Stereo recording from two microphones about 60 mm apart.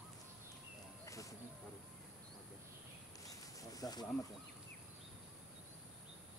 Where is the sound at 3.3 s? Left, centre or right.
Left.